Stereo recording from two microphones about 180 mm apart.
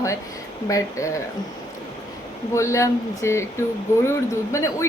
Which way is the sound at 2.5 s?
15° left (ahead or behind).